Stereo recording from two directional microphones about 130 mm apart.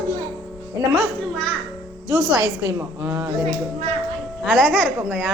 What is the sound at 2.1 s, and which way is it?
Speech, 30° right (ahead or behind).